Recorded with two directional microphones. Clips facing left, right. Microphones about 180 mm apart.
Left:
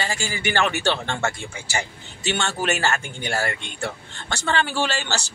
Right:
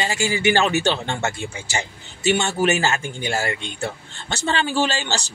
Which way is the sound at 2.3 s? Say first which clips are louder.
Right 3 dB; 15° right (ahead or behind).